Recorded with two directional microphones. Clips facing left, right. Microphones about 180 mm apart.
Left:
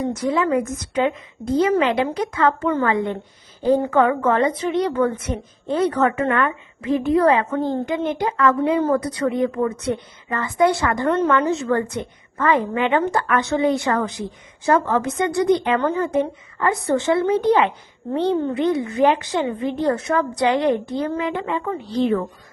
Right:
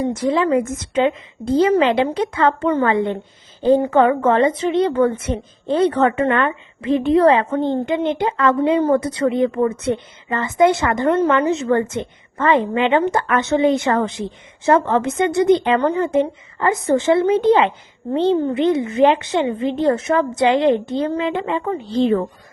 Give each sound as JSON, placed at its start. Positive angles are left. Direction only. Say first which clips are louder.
{"t": 0.1, "sound": "a woman's voice", "louder": "right 2 dB", "side_deg": -30}
{"t": 15.8, "sound": "a woman's voice", "louder": "right 3 dB", "side_deg": -15}